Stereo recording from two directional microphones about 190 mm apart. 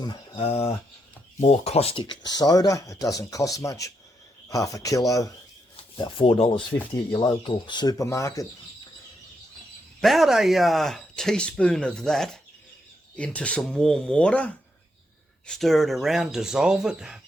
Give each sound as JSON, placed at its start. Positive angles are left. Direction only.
{"t": 0.0, "sound": "speech", "side_deg": 25}
{"t": 5.7, "sound": "speech", "side_deg": 30}
{"t": 6.7, "sound": "speech", "side_deg": 15}
{"t": 10.0, "sound": "speech", "side_deg": 0}